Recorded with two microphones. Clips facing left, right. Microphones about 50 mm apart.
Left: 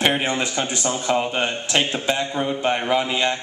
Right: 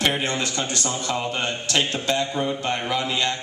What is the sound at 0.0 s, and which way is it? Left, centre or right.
A man's voice, centre.